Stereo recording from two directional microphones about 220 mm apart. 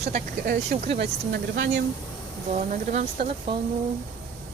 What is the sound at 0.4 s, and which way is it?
Speech, 45° right (ahead or behind).